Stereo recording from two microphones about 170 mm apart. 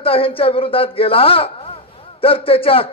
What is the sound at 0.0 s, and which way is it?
A man's voice, 35° left (ahead or behind).